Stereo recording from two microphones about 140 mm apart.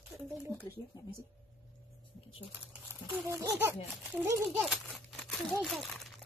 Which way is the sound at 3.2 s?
20° right (ahead or behind).